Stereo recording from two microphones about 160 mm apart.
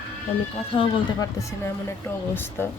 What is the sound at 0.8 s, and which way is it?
Speech, 30° left (ahead or behind).